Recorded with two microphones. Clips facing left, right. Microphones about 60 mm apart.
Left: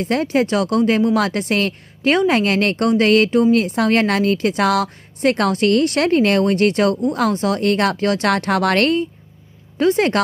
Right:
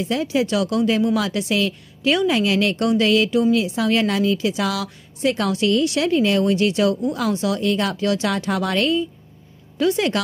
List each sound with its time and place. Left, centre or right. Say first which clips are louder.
0.0 s a woman's voice: left 3 dB; left
9.8 s a woman's voice: left 4 dB; left